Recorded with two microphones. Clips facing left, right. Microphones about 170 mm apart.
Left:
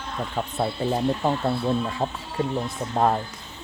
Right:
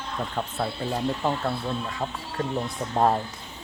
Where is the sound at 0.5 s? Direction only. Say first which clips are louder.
Left 5 dB; 20° left (ahead or behind).